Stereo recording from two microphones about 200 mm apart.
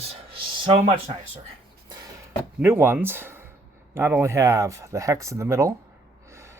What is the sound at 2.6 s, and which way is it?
Speech, 10° right (ahead or behind).